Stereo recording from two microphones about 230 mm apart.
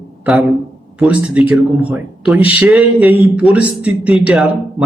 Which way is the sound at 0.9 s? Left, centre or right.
Centre.